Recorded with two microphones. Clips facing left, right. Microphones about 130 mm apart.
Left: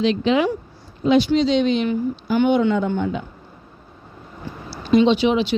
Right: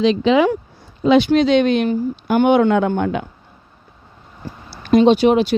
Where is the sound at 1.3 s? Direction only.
55° right (ahead or behind).